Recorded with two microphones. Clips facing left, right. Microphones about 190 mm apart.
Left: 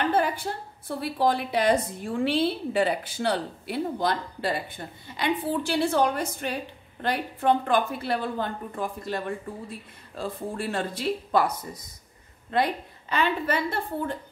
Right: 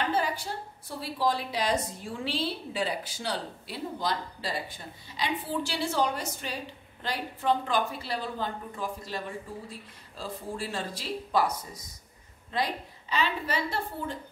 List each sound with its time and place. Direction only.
0.1 s a woman's voice: 55° left (ahead or behind)